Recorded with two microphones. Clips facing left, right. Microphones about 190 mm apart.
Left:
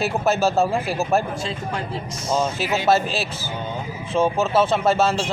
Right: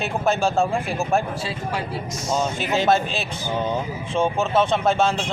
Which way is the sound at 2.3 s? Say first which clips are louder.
Left 1 dB; 5° left (ahead or behind).